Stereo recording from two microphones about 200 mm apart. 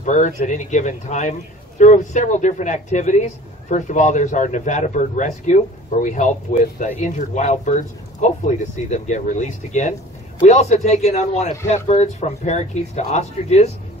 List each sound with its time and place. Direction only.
0.0 s a man's voice: 35° left (ahead or behind)